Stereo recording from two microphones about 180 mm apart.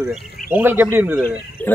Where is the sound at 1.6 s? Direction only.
10° left (ahead or behind).